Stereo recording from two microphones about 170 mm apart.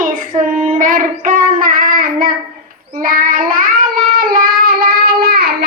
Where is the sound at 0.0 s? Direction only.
50° right (ahead or behind).